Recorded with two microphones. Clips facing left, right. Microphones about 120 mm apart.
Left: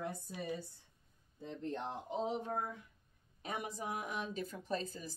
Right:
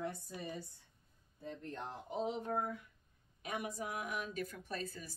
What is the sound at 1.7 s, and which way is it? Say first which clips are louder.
Speech: left 1 dB; 25° left (ahead or behind).